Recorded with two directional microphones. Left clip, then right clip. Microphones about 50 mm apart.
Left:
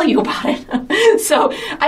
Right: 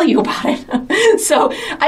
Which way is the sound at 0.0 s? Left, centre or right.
Right.